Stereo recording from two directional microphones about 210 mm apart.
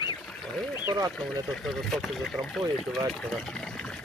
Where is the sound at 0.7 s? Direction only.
15° right (ahead or behind).